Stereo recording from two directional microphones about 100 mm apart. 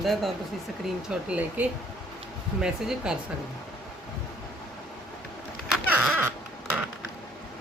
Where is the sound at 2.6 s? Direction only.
5° right (ahead or behind).